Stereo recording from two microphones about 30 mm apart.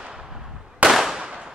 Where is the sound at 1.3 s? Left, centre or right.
Right.